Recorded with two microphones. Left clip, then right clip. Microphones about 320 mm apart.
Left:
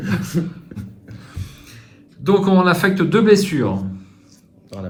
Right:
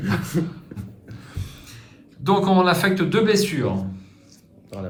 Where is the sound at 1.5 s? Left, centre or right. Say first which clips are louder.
Left 1 dB; centre.